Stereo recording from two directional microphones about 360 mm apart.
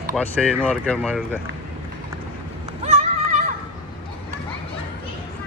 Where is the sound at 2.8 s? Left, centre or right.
Centre.